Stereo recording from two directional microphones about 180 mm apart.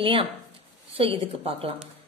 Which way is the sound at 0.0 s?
30° right (ahead or behind).